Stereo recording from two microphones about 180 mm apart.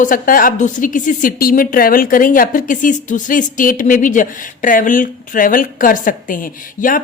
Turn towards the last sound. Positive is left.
turn(degrees=50)  # may be behind; listen again after turning